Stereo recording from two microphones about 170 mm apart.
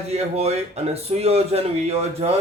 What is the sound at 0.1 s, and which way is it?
A man's voice, 40° right (ahead or behind).